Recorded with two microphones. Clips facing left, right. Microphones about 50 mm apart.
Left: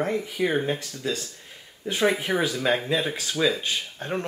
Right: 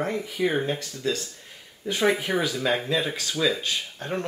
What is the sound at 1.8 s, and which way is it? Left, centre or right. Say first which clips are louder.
Speech: even; left.